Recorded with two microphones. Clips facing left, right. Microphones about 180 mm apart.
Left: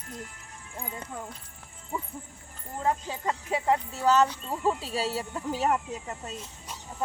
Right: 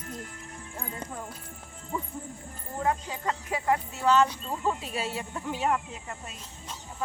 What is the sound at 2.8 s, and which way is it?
Speech, 25° left (ahead or behind).